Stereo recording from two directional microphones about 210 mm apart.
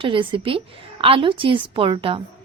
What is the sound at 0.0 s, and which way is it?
Speech, 25° right (ahead or behind).